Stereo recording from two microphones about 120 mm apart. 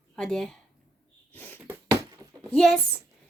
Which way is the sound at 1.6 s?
30° right (ahead or behind).